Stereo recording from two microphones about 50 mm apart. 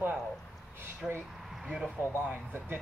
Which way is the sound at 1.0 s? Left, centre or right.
Centre.